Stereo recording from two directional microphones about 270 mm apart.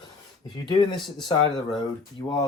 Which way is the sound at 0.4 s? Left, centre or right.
Centre.